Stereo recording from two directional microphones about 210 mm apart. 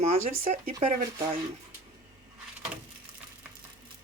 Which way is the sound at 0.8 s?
25° right (ahead or behind).